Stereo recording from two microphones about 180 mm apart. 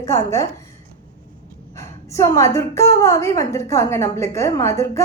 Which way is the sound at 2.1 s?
15° left (ahead or behind).